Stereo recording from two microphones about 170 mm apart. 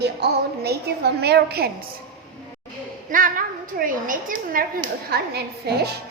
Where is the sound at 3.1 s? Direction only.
55° right (ahead or behind); by 5.9 s 70° right (ahead or behind).